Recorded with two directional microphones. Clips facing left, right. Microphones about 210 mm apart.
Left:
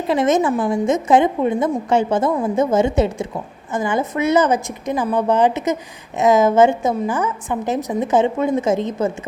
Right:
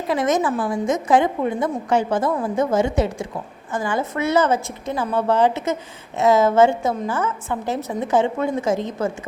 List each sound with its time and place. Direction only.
0.1 s a woman's voice: 25° left (ahead or behind)